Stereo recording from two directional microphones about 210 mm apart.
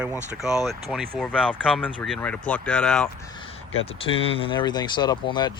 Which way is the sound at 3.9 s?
25° left (ahead or behind).